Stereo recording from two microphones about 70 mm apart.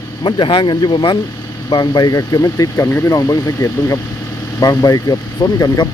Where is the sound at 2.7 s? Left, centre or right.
Left.